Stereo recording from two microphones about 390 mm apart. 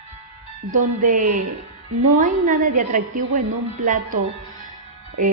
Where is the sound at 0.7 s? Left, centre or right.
Centre.